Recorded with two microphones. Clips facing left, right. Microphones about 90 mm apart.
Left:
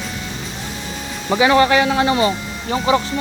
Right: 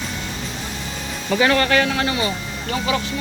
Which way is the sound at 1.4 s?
15° left (ahead or behind).